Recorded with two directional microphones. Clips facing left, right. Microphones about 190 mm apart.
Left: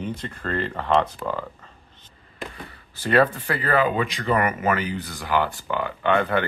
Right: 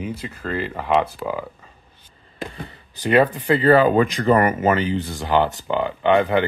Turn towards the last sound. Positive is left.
turn(degrees=-15)  # may be behind; listen again after turning